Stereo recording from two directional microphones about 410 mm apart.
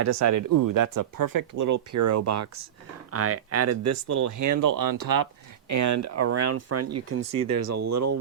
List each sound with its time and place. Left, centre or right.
0.0 s speech: right